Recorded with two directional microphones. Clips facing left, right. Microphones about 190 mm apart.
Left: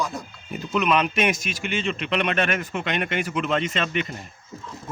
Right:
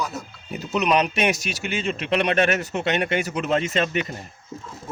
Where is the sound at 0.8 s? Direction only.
40° right (ahead or behind).